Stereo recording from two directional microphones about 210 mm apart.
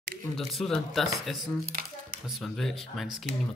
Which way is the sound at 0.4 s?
Centre (ahead or behind).